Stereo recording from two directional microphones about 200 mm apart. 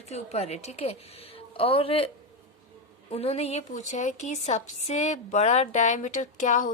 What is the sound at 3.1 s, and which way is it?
A woman's voice, 30° left (ahead or behind).